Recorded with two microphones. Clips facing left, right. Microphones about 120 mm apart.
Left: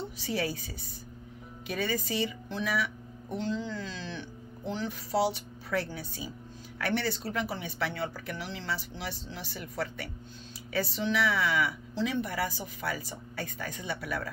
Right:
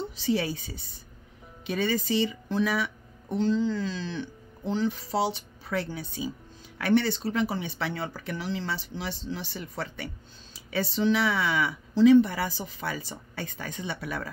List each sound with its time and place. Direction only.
0.0 s a woman's voice: 25° right (ahead or behind)